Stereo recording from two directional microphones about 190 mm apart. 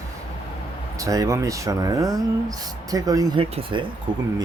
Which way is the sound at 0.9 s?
20° right (ahead or behind).